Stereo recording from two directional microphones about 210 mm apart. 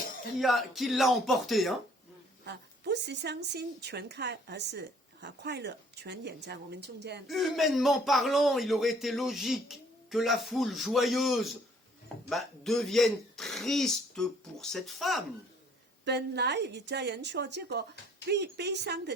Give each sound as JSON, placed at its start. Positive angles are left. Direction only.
{"t": 0.3, "sound": "speech", "side_deg": 0}
{"t": 2.4, "sound": "speech", "side_deg": -50}
{"t": 7.3, "sound": "speech", "side_deg": 0}
{"t": 16.0, "sound": "speech", "side_deg": -55}